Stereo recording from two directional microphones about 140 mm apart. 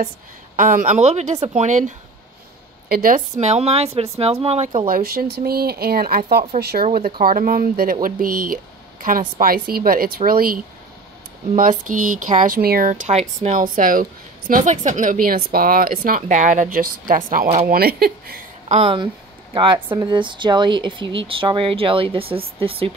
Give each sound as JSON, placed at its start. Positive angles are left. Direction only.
{"t": 0.6, "sound": "a woman's voice", "side_deg": -70}
{"t": 2.9, "sound": "a woman's voice", "side_deg": -90}
{"t": 3.3, "sound": "speech", "side_deg": -50}
{"t": 4.8, "sound": "speech", "side_deg": -90}
{"t": 6.2, "sound": "speech", "side_deg": -50}
{"t": 6.7, "sound": "speech", "side_deg": -90}
{"t": 11.5, "sound": "speech", "side_deg": -70}
{"t": 13.1, "sound": "a woman's voice", "side_deg": -50}
{"t": 14.5, "sound": "speech", "side_deg": -60}
{"t": 18.7, "sound": "speech", "side_deg": -40}